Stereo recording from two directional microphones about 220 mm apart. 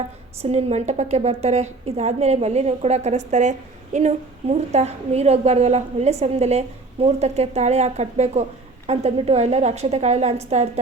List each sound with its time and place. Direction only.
0.4 s a woman's voice: 30° right (ahead or behind)